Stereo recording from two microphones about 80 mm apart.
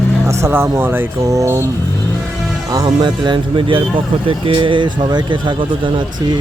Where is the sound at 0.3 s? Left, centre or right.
Right.